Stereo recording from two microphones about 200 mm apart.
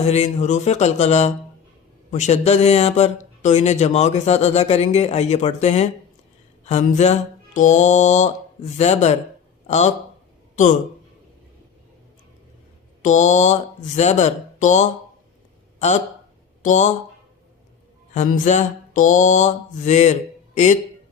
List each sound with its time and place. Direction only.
0.1 s speech: 35° left (ahead or behind)
13.0 s speech: 35° left (ahead or behind)
16.6 s speech: 35° left (ahead or behind)
18.1 s speech: 35° left (ahead or behind)